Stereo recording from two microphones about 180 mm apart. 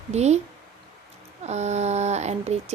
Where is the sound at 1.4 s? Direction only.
40° right (ahead or behind).